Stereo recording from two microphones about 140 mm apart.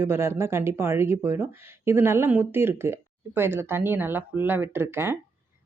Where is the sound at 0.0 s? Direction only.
20° right (ahead or behind).